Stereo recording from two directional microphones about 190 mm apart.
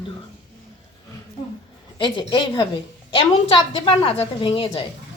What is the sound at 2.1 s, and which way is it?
A woman's voice, 25° left (ahead or behind).